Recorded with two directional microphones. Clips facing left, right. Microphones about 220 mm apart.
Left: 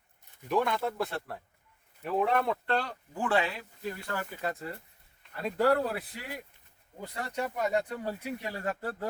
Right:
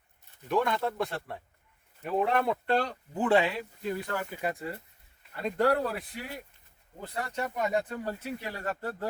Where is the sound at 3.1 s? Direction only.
20° right (ahead or behind).